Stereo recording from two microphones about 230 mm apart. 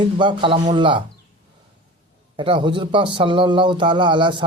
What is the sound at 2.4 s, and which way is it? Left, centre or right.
Speech, centre.